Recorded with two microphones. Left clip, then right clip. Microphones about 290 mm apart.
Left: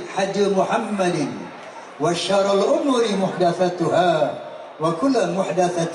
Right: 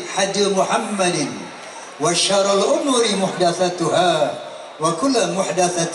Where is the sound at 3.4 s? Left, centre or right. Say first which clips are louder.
Right 1 dB; centre.